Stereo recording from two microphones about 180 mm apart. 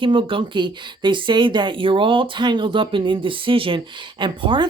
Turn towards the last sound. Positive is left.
turn(degrees=-25)  # may be behind; listen again after turning